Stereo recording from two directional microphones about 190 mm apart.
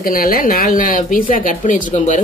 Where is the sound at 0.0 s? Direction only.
50° left (ahead or behind).